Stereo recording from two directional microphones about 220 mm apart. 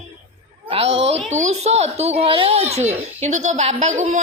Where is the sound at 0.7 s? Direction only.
25° right (ahead or behind).